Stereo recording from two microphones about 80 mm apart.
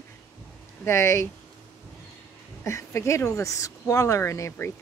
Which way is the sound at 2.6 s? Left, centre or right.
Left.